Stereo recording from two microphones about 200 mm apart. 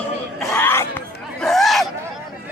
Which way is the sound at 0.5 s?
10° left (ahead or behind).